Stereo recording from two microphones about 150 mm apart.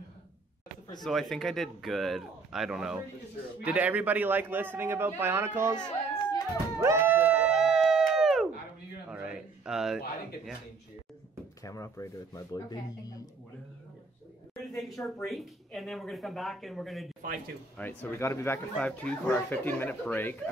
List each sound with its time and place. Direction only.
1.0 s a man's voice: centre (ahead or behind); by 5.8 s 15° right (ahead or behind)
5.8 s a sound: 30° left (ahead or behind)
6.8 s a sound: 15° right (ahead or behind)
11.6 s speech: 20° left (ahead or behind)
14.5 s a woman's voice: centre (ahead or behind)
17.7 s speech: 15° left (ahead or behind)